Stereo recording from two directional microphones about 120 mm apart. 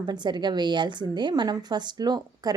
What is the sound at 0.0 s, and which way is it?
A woman's voice, 40° right (ahead or behind).